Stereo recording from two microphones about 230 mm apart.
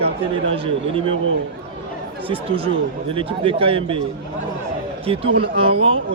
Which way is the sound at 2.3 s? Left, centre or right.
Right.